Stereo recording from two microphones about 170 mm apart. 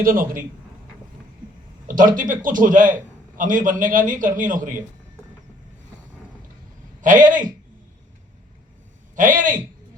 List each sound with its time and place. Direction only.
0.0 s a man's voice: 55° right (ahead or behind)
2.0 s a man's voice: 50° right (ahead or behind)
7.0 s a man's voice: 50° right (ahead or behind)
9.1 s a man's voice: 50° right (ahead or behind)